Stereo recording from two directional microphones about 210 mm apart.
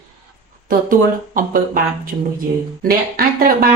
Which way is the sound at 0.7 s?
40° right (ahead or behind).